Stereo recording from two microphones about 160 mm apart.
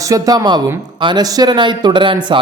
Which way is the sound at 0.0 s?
20° right (ahead or behind).